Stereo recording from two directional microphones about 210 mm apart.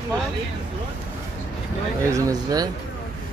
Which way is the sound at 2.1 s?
15° right (ahead or behind).